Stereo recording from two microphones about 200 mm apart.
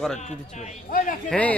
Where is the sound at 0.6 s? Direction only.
45° left (ahead or behind).